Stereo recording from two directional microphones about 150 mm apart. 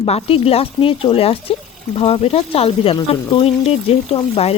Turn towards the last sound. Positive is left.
turn(degrees=40)  # may be behind; listen again after turning